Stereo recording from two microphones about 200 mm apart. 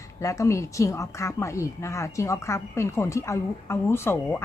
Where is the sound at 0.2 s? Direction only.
15° left (ahead or behind).